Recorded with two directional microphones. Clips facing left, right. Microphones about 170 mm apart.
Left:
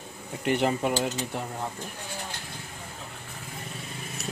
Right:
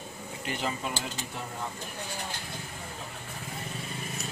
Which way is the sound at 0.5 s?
60° left (ahead or behind).